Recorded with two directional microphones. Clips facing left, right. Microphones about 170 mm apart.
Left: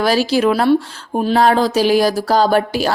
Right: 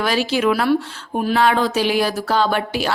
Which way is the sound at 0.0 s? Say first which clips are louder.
Left 4 dB; 35° left (ahead or behind).